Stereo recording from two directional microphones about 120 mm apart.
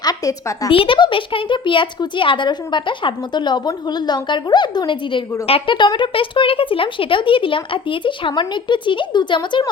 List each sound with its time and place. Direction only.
0.0 s a woman's voice: 30° left (ahead or behind)
0.7 s speech: 45° left (ahead or behind)